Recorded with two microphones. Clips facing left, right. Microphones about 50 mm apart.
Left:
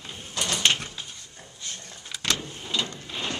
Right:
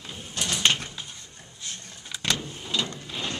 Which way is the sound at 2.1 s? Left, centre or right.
Centre.